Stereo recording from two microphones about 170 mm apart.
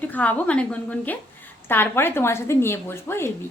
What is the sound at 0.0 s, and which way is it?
A woman's voice, 10° left (ahead or behind).